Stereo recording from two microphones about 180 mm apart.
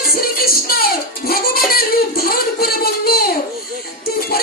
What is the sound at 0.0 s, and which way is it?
Music, 55° left (ahead or behind).